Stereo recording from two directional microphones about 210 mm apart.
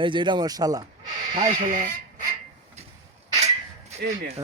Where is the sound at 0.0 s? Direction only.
20° right (ahead or behind).